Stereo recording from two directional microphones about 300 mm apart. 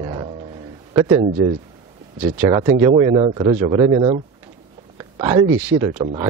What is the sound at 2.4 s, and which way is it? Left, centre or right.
Speech, centre.